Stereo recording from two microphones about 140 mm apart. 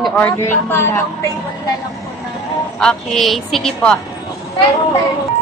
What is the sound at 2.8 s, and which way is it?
A woman's voice, 5° left (ahead or behind).